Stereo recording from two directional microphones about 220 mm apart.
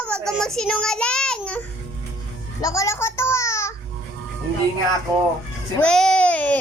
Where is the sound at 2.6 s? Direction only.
15° left (ahead or behind).